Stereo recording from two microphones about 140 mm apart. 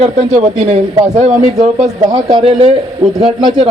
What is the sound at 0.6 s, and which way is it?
Speech, 55° right (ahead or behind).